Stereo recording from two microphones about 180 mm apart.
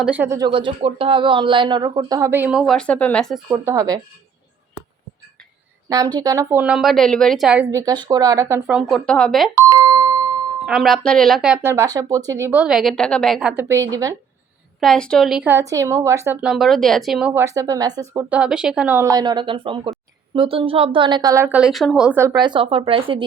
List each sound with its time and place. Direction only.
0.0 s speech: 10° right (ahead or behind)
3.5 s a woman's voice: 15° right (ahead or behind)
5.9 s speech: 20° right (ahead or behind)
9.0 s speech: 5° left (ahead or behind)
9.6 s doorbell: 15° right (ahead or behind)
10.7 s speech: centre (ahead or behind)
13.6 s speech: 15° right (ahead or behind)
14.8 s speech: 5° left (ahead or behind)
17.4 s a woman's voice: 20° right (ahead or behind)
18.3 s speech: 5° right (ahead or behind)
19.1 s a woman's voice: 25° right (ahead or behind)
22.4 s a woman's voice: 25° right (ahead or behind)